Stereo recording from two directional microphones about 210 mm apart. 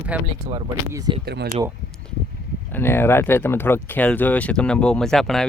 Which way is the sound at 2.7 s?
10° left (ahead or behind).